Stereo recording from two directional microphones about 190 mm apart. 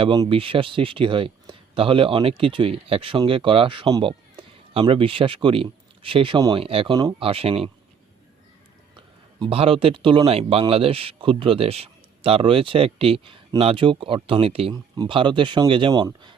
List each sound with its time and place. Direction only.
0.0 s speech: 25° right (ahead or behind)
9.0 s speech: 30° right (ahead or behind)